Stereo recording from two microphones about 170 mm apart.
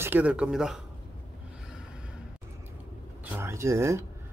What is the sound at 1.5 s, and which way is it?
Snort, 5° right (ahead or behind).